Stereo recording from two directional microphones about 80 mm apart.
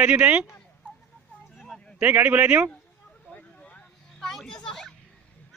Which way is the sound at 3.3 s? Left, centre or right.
Centre.